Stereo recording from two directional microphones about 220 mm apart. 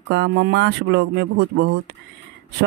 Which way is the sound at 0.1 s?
55° right (ahead or behind).